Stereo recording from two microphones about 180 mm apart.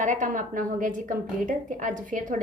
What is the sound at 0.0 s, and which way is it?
A woman's voice, 45° right (ahead or behind).